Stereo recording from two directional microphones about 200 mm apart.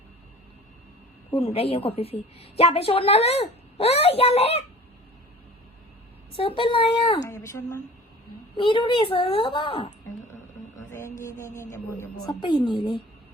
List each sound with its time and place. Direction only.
1.4 s a woman's voice: 30° left (ahead or behind)
6.6 s a woman's voice: 25° left (ahead or behind)
7.3 s a woman's voice: 15° left (ahead or behind)
11.2 s speech: 15° left (ahead or behind)